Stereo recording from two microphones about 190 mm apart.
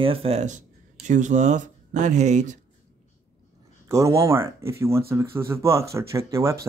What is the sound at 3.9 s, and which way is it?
Speech, 15° right (ahead or behind).